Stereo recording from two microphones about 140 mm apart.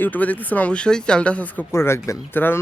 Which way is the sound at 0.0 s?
10° left (ahead or behind).